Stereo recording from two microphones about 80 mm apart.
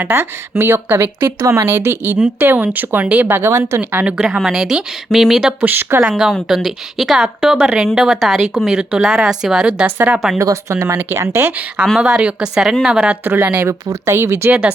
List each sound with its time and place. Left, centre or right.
0.0 s speech: right
1.4 s speech: right
4.2 s speech: centre
5.5 s speech: right
6.0 s speech: centre
9.8 s speech: right
10.3 s speech: right
11.9 s speech: centre
13.2 s speech: right
13.7 s speech: right